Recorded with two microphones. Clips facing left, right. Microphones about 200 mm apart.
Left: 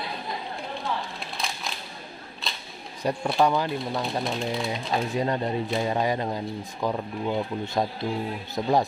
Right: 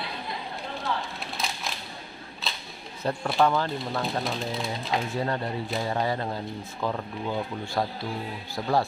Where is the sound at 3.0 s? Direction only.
10° left (ahead or behind).